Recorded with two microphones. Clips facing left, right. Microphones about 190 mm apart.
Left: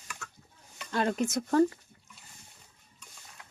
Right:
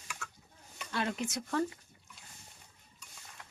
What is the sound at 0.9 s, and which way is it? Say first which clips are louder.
Speech: left 6 dB; 45° left (ahead or behind).